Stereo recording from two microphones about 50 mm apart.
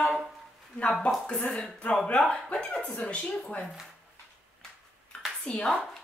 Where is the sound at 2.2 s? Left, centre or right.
Centre.